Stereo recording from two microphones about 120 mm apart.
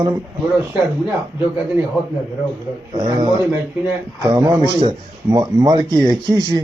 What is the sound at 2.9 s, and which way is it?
A man's voice, 35° right (ahead or behind).